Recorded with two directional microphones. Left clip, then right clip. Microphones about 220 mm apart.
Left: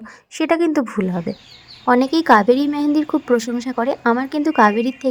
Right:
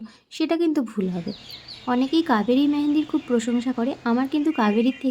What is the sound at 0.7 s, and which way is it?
A woman's voice, 15° left (ahead or behind).